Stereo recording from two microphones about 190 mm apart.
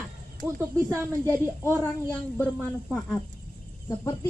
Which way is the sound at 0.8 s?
15° right (ahead or behind).